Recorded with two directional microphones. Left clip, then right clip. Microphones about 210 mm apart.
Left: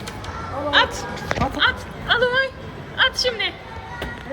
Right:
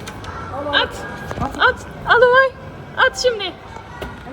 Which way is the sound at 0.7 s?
Centre (ahead or behind).